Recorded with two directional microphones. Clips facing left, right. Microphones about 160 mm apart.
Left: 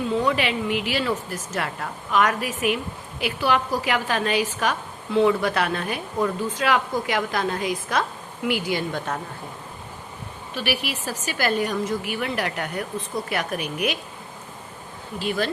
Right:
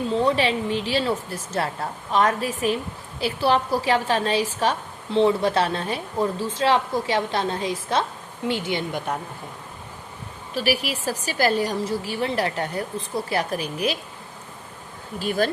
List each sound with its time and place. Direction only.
0.1 s speech: 30° right (ahead or behind)
10.5 s speech: 40° right (ahead or behind)
15.2 s speech: 45° right (ahead or behind)